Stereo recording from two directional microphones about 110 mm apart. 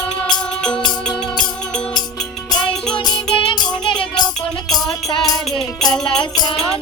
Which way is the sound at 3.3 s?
50° left (ahead or behind).